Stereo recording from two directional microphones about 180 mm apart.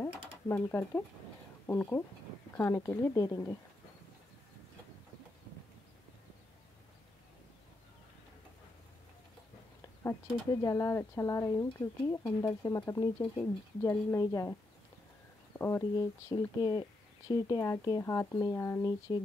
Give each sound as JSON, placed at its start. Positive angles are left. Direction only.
{"t": 0.0, "sound": "speech", "side_deg": 10}
{"t": 10.0, "sound": "speech", "side_deg": 20}
{"t": 15.6, "sound": "speech", "side_deg": 15}